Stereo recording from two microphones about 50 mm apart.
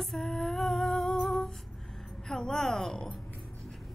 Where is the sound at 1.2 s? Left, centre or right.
Centre.